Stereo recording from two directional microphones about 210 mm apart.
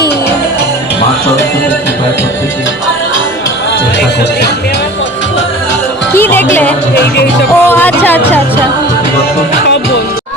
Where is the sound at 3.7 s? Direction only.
60° left (ahead or behind).